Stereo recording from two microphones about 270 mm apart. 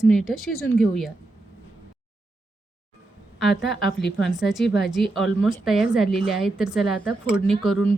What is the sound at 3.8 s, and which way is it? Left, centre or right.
Speech, left.